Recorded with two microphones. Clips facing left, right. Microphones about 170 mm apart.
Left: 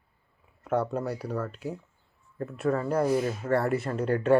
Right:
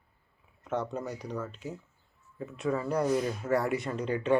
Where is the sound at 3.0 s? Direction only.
5° left (ahead or behind).